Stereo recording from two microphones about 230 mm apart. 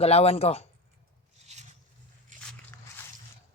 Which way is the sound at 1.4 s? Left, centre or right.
Right.